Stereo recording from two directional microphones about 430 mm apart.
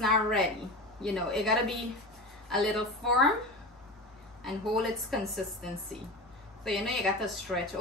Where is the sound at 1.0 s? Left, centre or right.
Centre.